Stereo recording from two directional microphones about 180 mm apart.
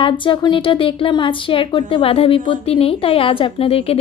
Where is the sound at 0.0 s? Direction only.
30° left (ahead or behind).